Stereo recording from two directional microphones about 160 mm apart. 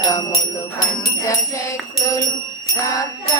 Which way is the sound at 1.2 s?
20° left (ahead or behind).